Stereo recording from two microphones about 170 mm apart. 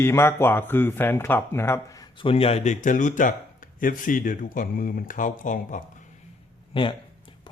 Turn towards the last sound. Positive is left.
turn(degrees=30)  # may be behind; listen again after turning